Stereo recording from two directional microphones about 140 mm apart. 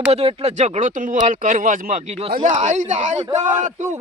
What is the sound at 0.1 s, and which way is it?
Speech, 50° right (ahead or behind).